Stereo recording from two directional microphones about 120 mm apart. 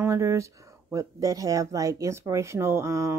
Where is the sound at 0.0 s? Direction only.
25° right (ahead or behind).